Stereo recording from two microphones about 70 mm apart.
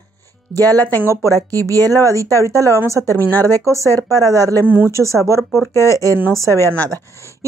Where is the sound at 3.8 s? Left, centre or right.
Left.